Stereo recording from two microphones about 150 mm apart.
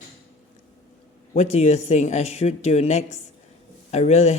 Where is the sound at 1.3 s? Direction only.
50° left (ahead or behind).